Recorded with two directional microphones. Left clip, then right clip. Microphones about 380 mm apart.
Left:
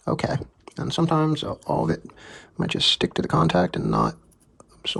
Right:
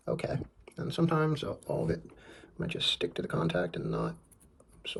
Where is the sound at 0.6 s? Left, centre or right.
Centre.